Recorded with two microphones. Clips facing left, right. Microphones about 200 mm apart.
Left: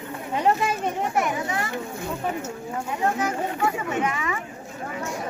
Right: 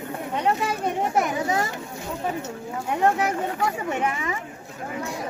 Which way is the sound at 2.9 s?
65° right (ahead or behind).